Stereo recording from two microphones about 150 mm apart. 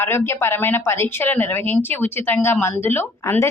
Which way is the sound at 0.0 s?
15° left (ahead or behind).